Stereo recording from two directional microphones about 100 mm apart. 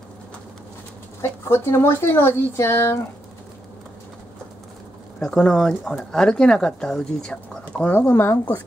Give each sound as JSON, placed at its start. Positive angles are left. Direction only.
{"t": 1.2, "sound": "speech", "side_deg": 25}
{"t": 5.2, "sound": "speech", "side_deg": 5}
{"t": 8.1, "sound": "speech", "side_deg": 25}